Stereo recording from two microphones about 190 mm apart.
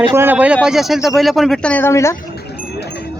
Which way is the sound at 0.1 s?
10° right (ahead or behind).